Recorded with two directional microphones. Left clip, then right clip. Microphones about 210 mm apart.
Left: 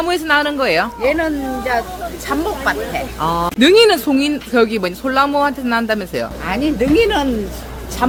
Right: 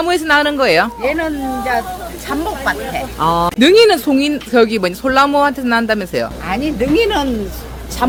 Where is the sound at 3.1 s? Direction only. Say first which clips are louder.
Right 4 dB; 50° right (ahead or behind).